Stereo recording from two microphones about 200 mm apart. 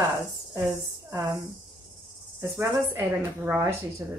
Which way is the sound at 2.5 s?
10° right (ahead or behind).